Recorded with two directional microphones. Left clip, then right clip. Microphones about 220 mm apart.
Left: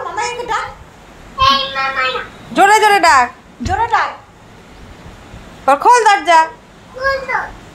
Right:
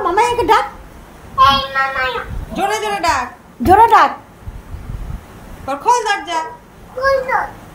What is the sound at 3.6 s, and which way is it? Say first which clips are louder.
Speech: right 7 dB; 45° right (ahead or behind).